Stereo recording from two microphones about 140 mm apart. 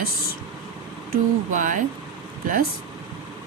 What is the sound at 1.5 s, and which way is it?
Speech, 65° right (ahead or behind).